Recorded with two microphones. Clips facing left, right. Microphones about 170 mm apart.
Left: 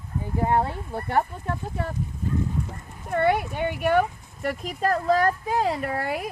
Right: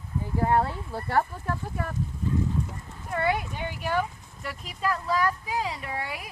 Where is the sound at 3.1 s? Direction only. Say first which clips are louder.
Left 5 dB; 60° left (ahead or behind).